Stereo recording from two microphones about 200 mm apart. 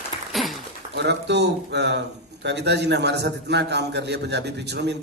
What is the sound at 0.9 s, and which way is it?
A man's voice, 60° right (ahead or behind).